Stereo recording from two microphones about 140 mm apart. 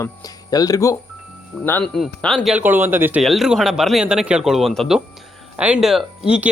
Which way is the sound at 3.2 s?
Centre (ahead or behind).